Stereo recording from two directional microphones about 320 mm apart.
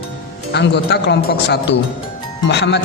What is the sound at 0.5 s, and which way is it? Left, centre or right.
Speech, left.